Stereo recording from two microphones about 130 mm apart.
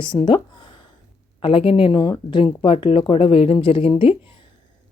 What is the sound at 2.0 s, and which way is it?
Speech, 30° left (ahead or behind).